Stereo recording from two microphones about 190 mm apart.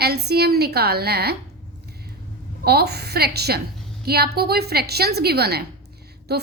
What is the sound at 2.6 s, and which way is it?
A woman's voice, 55° right (ahead or behind).